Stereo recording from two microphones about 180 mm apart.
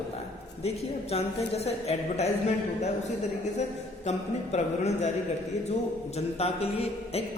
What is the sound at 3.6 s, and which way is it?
A man's voice, 40° left (ahead or behind).